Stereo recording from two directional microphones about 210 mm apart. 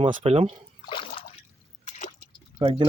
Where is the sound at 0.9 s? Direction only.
25° left (ahead or behind).